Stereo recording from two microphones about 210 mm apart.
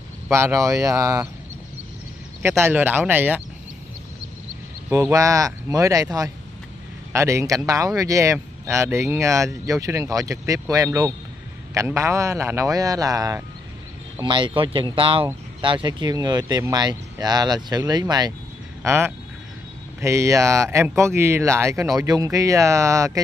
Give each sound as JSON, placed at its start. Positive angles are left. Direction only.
{"t": 0.3, "sound": "speech", "side_deg": -15}
{"t": 2.6, "sound": "speech", "side_deg": -10}
{"t": 4.8, "sound": "speech", "side_deg": -15}